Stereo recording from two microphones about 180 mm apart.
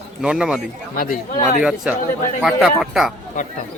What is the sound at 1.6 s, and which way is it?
Speech, 5° right (ahead or behind).